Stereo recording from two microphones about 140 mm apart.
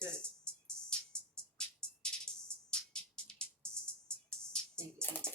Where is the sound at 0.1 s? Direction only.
5° left (ahead or behind).